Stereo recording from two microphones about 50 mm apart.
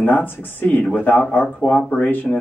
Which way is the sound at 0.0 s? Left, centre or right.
Left.